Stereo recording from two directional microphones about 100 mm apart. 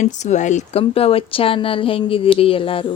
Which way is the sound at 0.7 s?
80° left.